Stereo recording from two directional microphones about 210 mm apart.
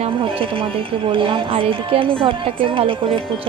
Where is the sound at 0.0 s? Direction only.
25° right (ahead or behind).